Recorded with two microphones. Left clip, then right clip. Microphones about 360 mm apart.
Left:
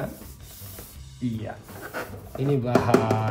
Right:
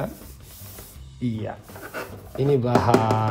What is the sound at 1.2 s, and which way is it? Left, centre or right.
Speech, right.